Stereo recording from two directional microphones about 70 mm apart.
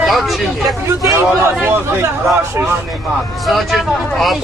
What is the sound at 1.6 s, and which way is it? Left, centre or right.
Speech, right.